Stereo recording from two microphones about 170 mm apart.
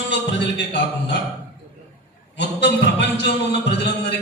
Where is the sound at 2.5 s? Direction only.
90° left.